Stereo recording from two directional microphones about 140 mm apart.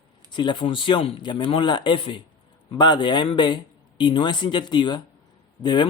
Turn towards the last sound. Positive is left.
turn(degrees=30)  # may be behind; listen again after turning